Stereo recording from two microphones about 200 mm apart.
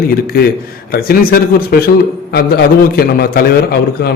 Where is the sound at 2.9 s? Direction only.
50° left (ahead or behind).